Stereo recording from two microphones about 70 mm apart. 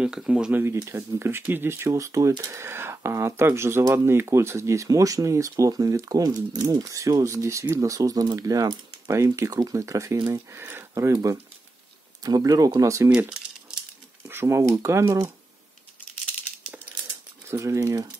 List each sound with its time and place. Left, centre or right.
0.0 s speech: centre
0.5 s speech: right
0.7 s speech: right
2.5 s speech: right
9.8 s speech: right
10.5 s speech: right
12.2 s speech: right
14.2 s a sound: right
14.6 s speech: right
17.5 s speech: right